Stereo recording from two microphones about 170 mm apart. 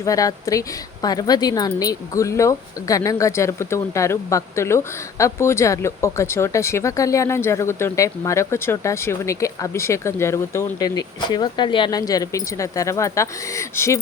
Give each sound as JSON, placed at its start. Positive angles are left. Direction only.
{"t": 0.0, "sound": "speech", "side_deg": 20}